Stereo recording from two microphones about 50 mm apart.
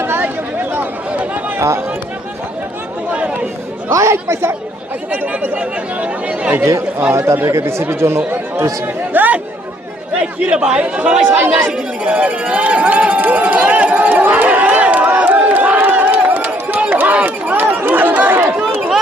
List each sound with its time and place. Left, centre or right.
0.0 s a sound: right
1.2 s run: right
1.5 s speech: right
3.1 s chatter: right
3.8 s speech: right
5.1 s speech: right
5.5 s speech: right
7.1 s speech: right
9.1 s speech: right
10.5 s speech: centre
11.3 s speech: right
12.0 s a sound: right
16.9 s run: right
17.2 s chatter: right